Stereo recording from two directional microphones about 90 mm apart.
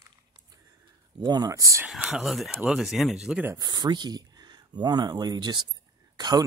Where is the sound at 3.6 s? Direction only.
50° right (ahead or behind).